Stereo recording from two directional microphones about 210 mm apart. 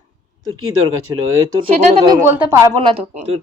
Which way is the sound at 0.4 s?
80° right.